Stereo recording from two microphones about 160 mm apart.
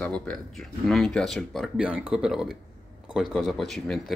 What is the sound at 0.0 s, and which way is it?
Speech, 5° left (ahead or behind).